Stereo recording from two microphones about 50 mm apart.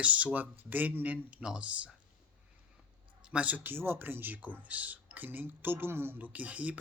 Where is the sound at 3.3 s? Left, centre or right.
Right.